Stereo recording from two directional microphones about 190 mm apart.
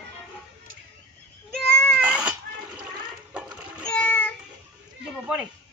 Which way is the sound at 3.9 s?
5° left (ahead or behind).